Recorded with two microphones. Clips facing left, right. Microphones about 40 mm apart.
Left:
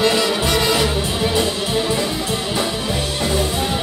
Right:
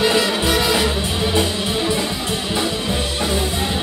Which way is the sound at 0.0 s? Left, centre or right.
Centre.